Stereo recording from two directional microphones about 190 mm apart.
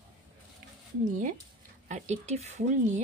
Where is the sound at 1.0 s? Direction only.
45° right (ahead or behind).